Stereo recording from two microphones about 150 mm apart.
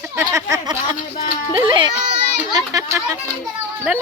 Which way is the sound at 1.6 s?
35° right (ahead or behind).